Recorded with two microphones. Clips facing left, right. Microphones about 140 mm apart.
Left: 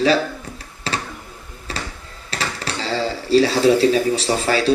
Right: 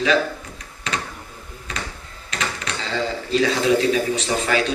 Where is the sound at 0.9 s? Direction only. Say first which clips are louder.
Left 2 dB; 35° left (ahead or behind).